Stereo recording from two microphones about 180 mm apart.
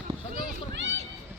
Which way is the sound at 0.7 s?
80° right.